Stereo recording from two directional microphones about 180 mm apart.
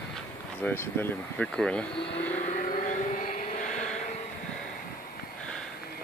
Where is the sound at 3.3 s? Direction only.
45° left (ahead or behind).